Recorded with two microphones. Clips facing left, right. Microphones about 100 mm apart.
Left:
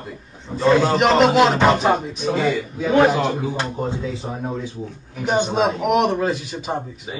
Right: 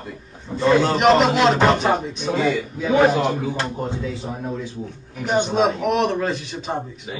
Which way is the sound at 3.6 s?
20° left (ahead or behind).